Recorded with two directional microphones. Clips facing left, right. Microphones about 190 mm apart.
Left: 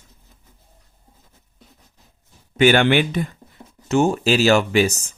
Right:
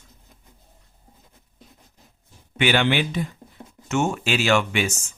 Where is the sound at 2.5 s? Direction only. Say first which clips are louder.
Left 6 dB; 45° left (ahead or behind).